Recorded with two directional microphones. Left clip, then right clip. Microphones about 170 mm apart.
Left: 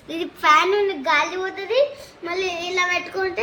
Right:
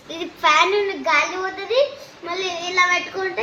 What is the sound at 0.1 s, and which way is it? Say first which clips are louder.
Speech: left 1 dB; 75° left (ahead or behind).